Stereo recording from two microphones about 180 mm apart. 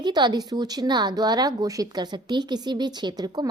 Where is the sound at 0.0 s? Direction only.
25° right (ahead or behind).